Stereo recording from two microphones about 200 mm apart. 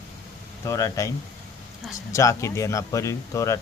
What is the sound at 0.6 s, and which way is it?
Speech, 15° left (ahead or behind).